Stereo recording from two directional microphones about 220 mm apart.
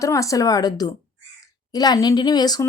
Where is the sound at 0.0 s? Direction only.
15° left (ahead or behind).